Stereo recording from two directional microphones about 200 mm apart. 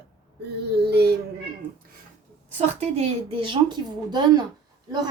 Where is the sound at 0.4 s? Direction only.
55° right (ahead or behind).